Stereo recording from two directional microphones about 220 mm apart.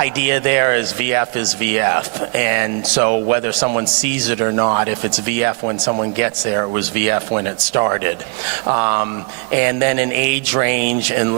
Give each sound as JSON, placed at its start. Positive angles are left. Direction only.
{"t": 0.0, "sound": "speech", "side_deg": -15}